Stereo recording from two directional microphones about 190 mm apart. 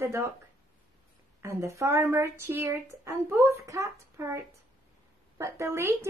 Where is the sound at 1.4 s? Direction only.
15° right (ahead or behind).